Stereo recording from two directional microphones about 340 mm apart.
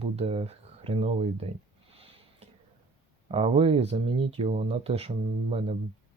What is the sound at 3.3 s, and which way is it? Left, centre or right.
Speech, centre.